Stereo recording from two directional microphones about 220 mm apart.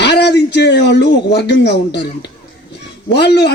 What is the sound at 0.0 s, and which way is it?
Speech, 50° left (ahead or behind).